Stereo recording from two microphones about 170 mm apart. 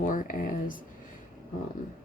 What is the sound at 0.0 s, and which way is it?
Speech, 50° left (ahead or behind).